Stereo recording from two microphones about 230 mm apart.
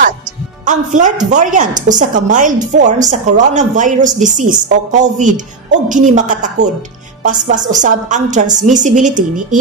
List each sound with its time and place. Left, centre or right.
0.7 s a woman's voice: right